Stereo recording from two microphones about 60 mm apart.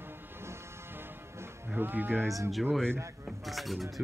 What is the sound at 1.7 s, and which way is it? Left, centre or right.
Speech, right.